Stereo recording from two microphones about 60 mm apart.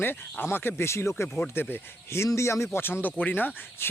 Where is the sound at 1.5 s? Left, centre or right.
Left.